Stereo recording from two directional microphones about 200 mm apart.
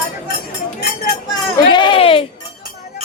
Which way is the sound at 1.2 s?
20° left (ahead or behind).